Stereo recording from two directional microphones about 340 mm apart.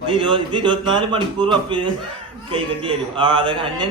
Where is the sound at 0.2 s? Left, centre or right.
Centre.